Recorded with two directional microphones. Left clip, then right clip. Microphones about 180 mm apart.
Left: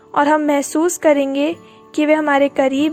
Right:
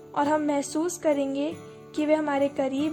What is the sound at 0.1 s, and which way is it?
Speech, 35° left (ahead or behind).